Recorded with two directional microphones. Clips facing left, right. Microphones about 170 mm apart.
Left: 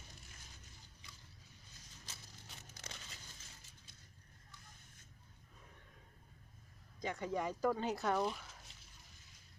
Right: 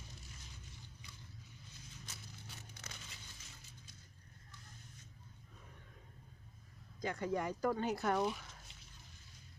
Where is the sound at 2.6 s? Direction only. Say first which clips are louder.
Even; 35° left (ahead or behind).